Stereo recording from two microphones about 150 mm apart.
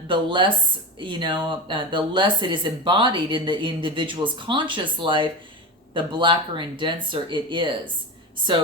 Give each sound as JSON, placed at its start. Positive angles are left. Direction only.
{"t": 0.1, "sound": "speech", "side_deg": -35}